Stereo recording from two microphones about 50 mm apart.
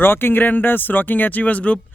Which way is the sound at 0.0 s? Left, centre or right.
Left.